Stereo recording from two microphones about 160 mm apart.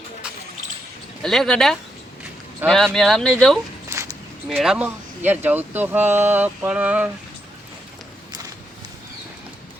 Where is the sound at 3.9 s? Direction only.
15° right (ahead or behind).